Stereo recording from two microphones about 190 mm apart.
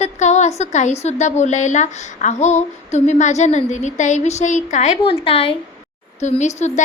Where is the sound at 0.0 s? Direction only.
35° left (ahead or behind).